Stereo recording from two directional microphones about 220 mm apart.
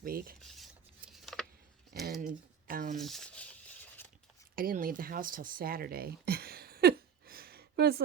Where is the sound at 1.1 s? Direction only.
Centre (ahead or behind).